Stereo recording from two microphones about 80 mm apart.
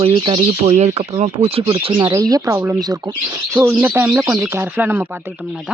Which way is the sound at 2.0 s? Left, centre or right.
Right.